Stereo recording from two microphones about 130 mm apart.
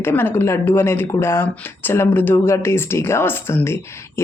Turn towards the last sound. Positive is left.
turn(degrees=20)  # may be behind; listen again after turning